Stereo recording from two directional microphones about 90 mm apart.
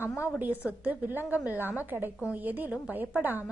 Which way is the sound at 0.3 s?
20° right (ahead or behind).